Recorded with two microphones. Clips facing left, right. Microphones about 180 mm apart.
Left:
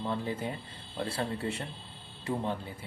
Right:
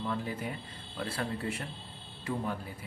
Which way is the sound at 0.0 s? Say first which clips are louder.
Left 2 dB; 30° left (ahead or behind).